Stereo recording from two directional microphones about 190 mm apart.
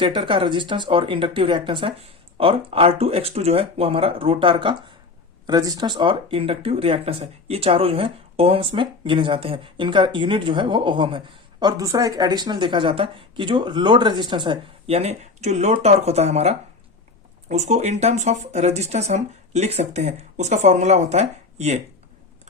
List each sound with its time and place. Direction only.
0.0 s speech: 25° right (ahead or behind)